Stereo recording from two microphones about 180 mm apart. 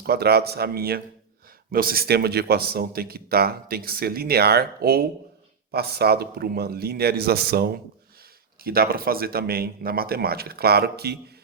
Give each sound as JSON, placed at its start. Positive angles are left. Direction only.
{"t": 0.0, "sound": "speech", "side_deg": -60}